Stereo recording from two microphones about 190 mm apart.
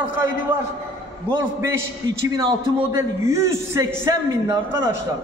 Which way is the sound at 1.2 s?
10° right (ahead or behind).